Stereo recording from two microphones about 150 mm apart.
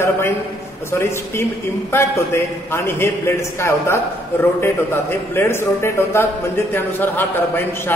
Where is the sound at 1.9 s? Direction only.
15° left (ahead or behind).